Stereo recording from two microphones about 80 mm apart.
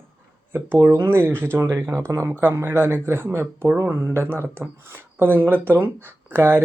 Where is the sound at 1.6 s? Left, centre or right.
Right.